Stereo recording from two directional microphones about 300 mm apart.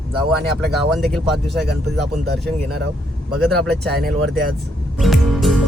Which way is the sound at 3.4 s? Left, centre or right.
Centre.